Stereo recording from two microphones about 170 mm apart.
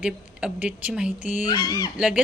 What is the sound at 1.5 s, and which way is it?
Speech, 20° left (ahead or behind).